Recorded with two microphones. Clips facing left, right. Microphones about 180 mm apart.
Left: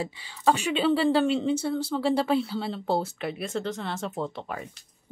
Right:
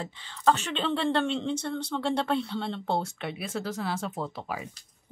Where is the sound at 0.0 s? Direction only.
10° left (ahead or behind).